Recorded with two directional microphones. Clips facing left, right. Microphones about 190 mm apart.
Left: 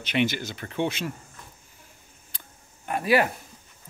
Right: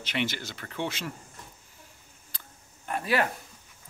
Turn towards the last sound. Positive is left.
turn(degrees=10)  # may be behind; listen again after turning